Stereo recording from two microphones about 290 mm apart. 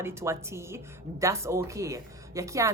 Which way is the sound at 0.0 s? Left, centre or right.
Centre.